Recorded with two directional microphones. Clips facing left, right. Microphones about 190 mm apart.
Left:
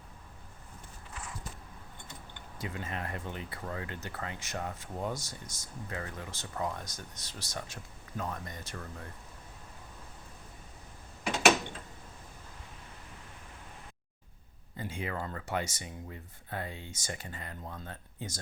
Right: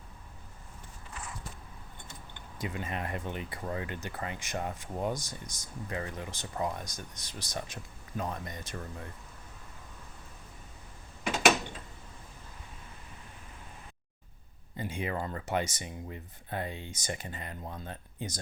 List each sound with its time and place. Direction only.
2.6 s speech: 15° right (ahead or behind)
14.8 s speech: 15° right (ahead or behind)